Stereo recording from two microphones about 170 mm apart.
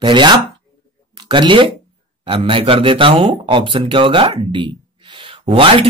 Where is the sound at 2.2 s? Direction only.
30° right (ahead or behind).